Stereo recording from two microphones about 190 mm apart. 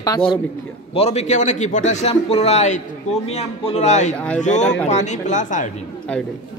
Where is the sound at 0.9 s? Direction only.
35° left (ahead or behind).